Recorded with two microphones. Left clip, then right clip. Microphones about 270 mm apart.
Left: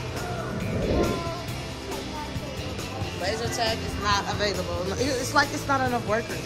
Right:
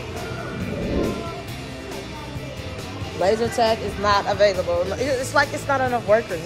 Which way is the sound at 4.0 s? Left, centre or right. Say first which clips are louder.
Right 8 dB; centre.